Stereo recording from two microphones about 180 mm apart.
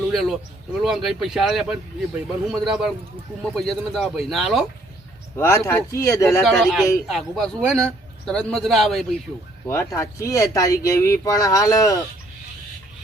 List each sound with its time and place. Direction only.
0.1 s a sound: centre (ahead or behind)
0.8 s speech: centre (ahead or behind)
5.4 s speech: 15° left (ahead or behind)
6.4 s speech: centre (ahead or behind)
9.6 s speech: 15° left (ahead or behind)